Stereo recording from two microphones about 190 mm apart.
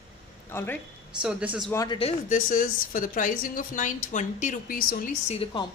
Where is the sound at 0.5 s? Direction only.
10° left (ahead or behind).